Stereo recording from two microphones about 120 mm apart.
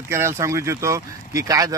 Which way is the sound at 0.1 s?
25° right (ahead or behind).